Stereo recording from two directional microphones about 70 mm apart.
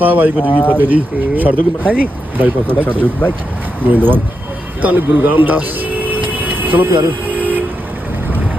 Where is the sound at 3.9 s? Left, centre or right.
Right.